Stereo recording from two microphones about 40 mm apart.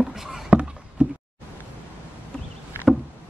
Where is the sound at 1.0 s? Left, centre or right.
Right.